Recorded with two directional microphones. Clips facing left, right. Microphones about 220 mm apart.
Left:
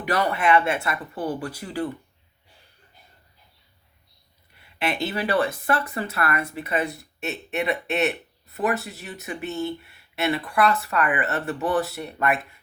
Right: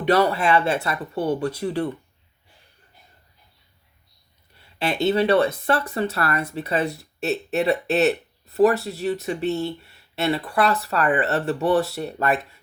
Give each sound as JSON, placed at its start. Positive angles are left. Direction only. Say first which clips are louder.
{"t": 0.0, "sound": "speech", "louder": "right 4 dB", "side_deg": -30}
{"t": 4.6, "sound": "speech", "louder": "right 5 dB", "side_deg": -25}